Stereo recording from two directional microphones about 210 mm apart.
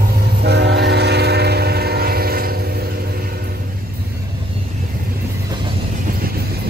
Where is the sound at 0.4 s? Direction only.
55° right (ahead or behind).